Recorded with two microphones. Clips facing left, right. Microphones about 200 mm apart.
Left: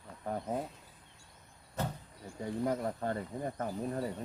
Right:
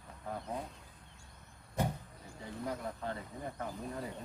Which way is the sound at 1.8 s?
15° right (ahead or behind).